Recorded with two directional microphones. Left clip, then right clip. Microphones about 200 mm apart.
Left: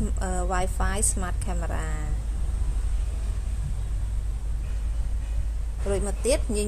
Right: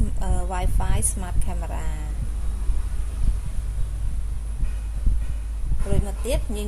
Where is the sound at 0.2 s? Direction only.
10° left (ahead or behind).